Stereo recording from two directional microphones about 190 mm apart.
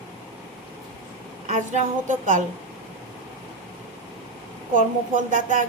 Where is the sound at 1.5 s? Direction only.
40° right (ahead or behind).